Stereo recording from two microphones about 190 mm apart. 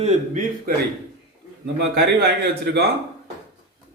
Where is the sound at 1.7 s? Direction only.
60° right (ahead or behind).